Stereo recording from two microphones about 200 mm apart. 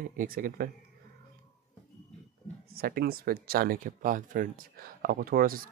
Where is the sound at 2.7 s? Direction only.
50° right (ahead or behind).